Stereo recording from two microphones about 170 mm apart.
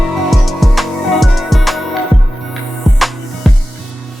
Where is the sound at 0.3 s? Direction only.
Centre (ahead or behind).